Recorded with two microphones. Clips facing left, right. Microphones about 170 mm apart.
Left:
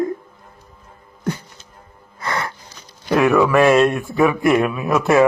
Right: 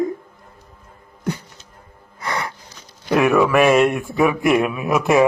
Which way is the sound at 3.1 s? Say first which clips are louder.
Left 1 dB; 20° right (ahead or behind).